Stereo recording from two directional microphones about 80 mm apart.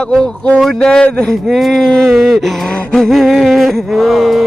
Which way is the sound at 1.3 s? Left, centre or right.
Centre.